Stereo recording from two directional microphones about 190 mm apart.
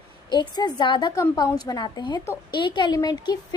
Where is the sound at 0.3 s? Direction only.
20° left (ahead or behind).